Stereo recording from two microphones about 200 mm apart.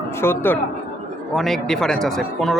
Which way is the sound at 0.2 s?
10° left (ahead or behind).